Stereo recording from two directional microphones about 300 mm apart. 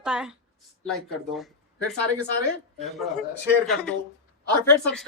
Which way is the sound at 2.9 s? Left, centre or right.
Centre.